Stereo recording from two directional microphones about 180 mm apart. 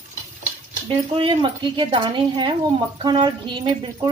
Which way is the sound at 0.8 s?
30° right (ahead or behind).